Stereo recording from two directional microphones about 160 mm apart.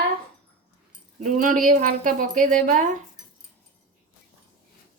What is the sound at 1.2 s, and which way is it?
Speech, 60° right (ahead or behind).